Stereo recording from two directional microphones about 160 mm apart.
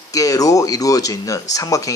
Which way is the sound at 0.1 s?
20° left (ahead or behind).